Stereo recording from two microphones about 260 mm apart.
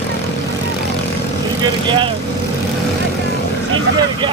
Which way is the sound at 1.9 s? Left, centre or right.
Centre.